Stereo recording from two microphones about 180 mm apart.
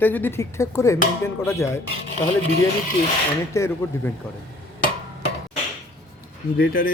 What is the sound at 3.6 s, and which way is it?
Speech, 15° left (ahead or behind).